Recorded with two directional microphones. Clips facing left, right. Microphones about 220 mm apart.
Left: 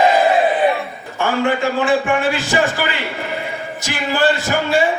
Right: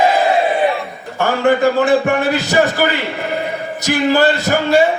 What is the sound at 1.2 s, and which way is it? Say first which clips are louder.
A man's voice: right 4 dB; 40° right (ahead or behind).